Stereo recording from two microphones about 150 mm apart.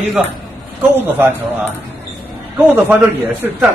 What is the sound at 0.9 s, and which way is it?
Speech, 15° right (ahead or behind).